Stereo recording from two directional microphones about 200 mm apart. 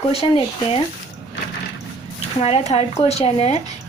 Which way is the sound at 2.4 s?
30° left (ahead or behind).